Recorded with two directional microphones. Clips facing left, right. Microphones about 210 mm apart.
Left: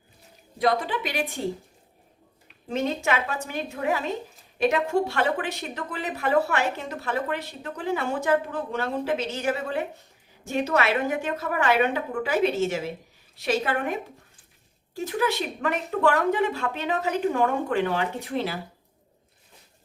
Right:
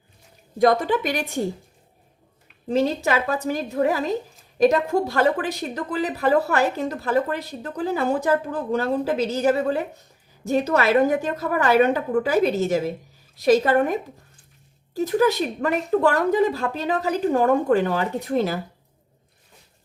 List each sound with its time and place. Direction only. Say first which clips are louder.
0.6 s a woman's voice: right 6 dB; 45° right (ahead or behind)
2.6 s a woman's voice: right 5 dB; 35° right (ahead or behind)